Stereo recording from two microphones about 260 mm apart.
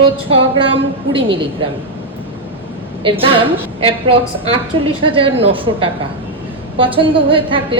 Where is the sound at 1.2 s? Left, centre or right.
Centre.